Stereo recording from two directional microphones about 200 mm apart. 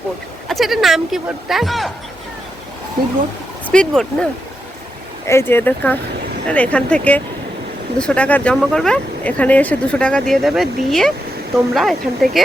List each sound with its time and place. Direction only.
0.4 s speech: centre (ahead or behind)
3.7 s speech: 5° left (ahead or behind)